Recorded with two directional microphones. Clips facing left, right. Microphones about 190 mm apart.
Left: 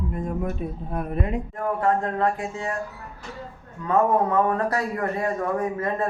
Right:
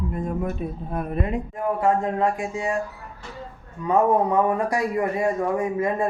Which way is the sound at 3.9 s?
15° right (ahead or behind).